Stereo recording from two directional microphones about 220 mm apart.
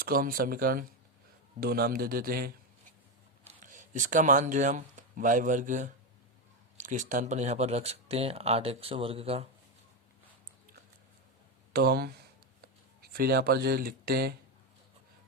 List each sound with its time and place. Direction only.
0.0 s a man's voice: 40° right (ahead or behind)
11.7 s a man's voice: 45° right (ahead or behind)